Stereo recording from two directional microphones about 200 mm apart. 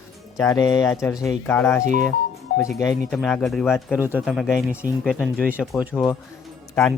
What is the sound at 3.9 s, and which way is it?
Speech, 5° right (ahead or behind).